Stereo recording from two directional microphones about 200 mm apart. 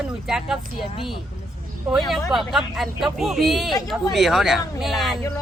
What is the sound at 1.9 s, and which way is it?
Speech, 5° right (ahead or behind).